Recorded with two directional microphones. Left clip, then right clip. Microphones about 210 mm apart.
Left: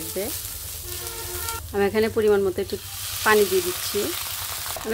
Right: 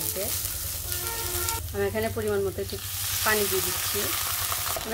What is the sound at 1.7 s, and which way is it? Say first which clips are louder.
Speech: left 8 dB; 55° left (ahead or behind).